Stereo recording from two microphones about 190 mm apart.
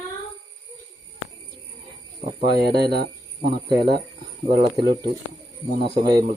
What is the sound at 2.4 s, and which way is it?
Speech, 55° right (ahead or behind).